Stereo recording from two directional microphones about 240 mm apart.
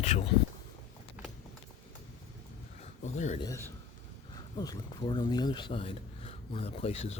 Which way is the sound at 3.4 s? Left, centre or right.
Centre.